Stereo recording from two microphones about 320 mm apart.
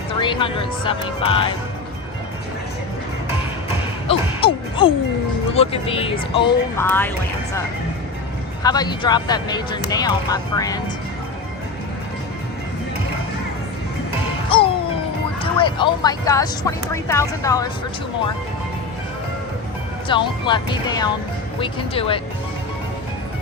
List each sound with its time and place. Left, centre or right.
0.2 s speech: centre
4.1 s music: centre
5.5 s speech: centre
8.6 s speech: centre
14.5 s music: centre
15.4 s speech: centre
20.1 s speech: centre